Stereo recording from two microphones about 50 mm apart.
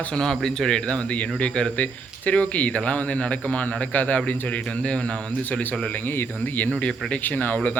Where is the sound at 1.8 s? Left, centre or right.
Left.